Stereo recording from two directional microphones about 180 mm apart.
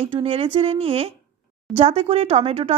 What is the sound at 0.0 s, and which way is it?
A woman's voice, 30° right (ahead or behind).